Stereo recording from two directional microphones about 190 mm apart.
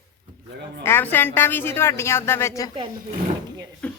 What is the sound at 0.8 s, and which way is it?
A woman's voice, 10° left (ahead or behind).